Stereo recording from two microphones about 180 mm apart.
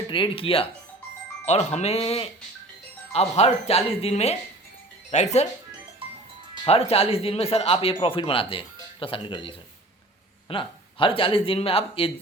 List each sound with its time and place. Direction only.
0.1 s speech: 30° left (ahead or behind)
6.7 s speech: 35° left (ahead or behind)